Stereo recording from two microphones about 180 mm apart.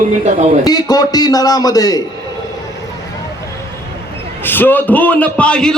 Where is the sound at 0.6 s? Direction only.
20° left (ahead or behind).